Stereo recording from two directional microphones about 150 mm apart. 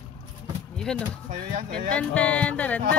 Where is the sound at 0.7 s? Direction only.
5° left (ahead or behind).